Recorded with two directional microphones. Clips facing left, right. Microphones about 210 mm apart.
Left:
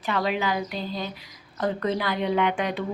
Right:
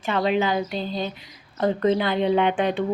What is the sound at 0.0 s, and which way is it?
A woman's voice, 25° right (ahead or behind).